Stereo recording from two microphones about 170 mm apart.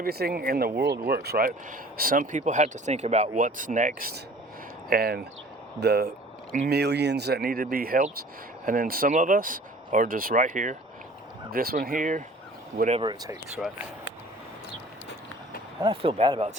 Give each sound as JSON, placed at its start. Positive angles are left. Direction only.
{"t": 0.0, "sound": "speech", "side_deg": -65}
{"t": 4.9, "sound": "speech", "side_deg": -60}
{"t": 11.5, "sound": "speech", "side_deg": -65}
{"t": 13.0, "sound": "speech", "side_deg": -25}
{"t": 13.6, "sound": "speech", "side_deg": 0}
{"t": 15.8, "sound": "speech", "side_deg": -30}